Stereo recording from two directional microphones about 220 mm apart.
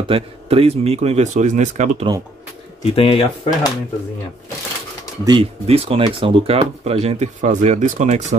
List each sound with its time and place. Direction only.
0.1 s speech: 25° right (ahead or behind)
2.8 s speech: 25° left (ahead or behind)
5.2 s speech: 20° right (ahead or behind)